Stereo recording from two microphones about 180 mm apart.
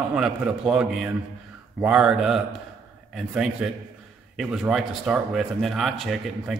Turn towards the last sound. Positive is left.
turn(degrees=0)  # may be behind; listen again after turning